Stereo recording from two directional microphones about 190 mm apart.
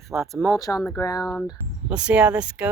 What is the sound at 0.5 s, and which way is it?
Speech, 20° left (ahead or behind).